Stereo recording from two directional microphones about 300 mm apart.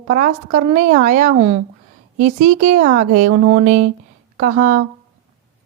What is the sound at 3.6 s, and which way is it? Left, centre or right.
A woman's voice, right.